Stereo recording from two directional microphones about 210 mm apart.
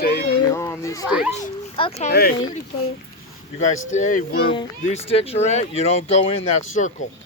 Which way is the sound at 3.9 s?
35° left (ahead or behind).